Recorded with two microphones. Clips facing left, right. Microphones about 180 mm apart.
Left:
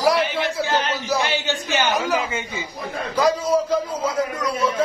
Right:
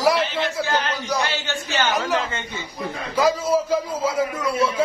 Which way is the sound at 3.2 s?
5° right (ahead or behind).